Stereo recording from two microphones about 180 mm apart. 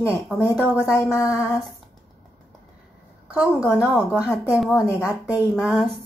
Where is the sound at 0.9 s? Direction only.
15° left (ahead or behind).